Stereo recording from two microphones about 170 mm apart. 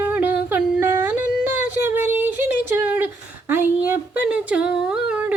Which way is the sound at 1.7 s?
10° right (ahead or behind).